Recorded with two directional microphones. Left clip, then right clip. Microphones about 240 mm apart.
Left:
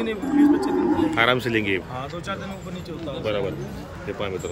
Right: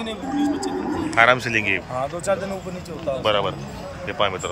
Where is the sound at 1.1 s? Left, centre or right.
Centre.